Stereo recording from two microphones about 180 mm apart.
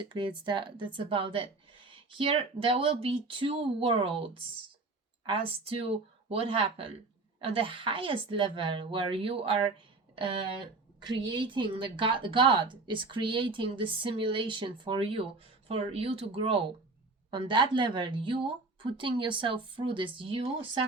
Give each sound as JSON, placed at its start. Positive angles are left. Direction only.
{"t": 0.0, "sound": "a woman's voice", "side_deg": -25}